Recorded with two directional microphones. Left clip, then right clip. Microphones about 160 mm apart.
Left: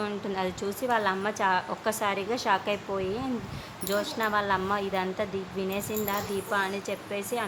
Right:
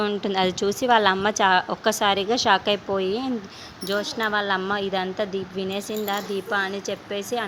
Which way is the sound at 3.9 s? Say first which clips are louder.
Right 4 dB; 25° right (ahead or behind).